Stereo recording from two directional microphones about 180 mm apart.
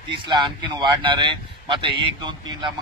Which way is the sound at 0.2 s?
25° right (ahead or behind).